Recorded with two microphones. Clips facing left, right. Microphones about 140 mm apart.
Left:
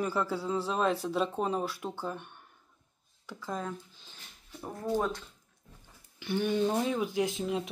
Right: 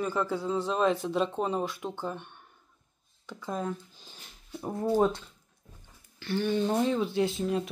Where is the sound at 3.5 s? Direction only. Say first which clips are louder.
Right 3 dB; 10° right (ahead or behind).